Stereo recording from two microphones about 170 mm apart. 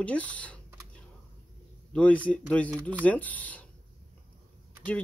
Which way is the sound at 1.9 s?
10° left (ahead or behind).